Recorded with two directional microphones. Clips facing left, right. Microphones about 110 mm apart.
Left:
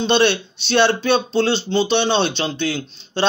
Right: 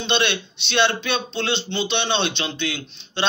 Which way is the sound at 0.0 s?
40° left (ahead or behind).